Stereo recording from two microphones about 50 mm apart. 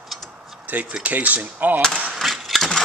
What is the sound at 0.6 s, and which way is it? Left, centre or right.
Speech, right.